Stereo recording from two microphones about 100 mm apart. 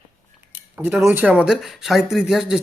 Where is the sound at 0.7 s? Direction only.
20° right (ahead or behind).